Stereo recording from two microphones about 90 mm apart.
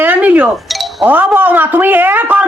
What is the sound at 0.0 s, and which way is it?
Chink, 20° right (ahead or behind).